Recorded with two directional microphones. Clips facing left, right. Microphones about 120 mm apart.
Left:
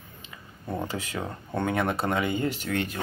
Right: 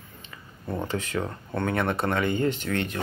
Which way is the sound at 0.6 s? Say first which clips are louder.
Right 2 dB; 10° left (ahead or behind).